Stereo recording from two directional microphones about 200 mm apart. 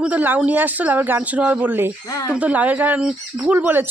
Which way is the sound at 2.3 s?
5° right (ahead or behind).